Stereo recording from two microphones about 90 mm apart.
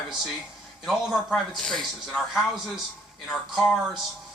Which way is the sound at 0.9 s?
Centre (ahead or behind).